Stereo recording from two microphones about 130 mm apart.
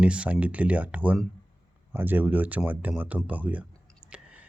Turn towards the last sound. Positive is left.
turn(degrees=-10)  # may be behind; listen again after turning